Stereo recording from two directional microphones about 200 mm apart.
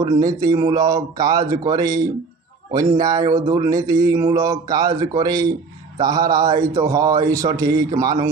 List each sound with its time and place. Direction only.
0.0 s speech: 15° right (ahead or behind)